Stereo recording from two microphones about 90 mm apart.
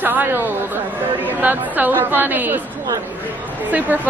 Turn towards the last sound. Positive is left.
turn(degrees=-15)  # may be behind; listen again after turning